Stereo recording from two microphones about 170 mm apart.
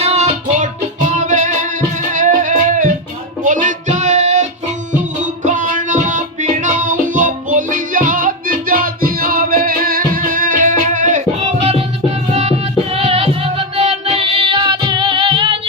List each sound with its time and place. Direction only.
0.0 s music: 40° right (ahead or behind)